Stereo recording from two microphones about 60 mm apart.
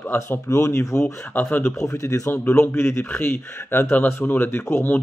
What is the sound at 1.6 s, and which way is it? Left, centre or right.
Speech, left.